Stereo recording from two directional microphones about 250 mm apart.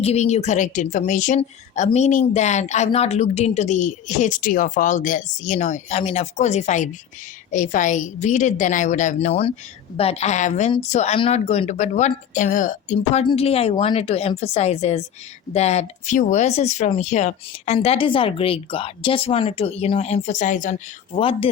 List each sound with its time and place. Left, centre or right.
0.0 s a woman's voice: left